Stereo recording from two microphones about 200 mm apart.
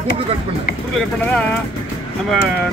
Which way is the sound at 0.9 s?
5° left (ahead or behind).